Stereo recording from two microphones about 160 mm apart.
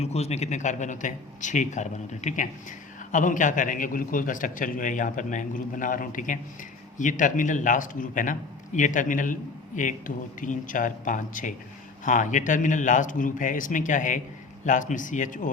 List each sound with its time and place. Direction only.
0.0 s a man's voice: 40° left (ahead or behind)